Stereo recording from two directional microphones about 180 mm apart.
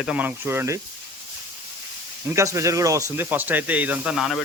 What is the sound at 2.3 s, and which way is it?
Speech, 15° right (ahead or behind).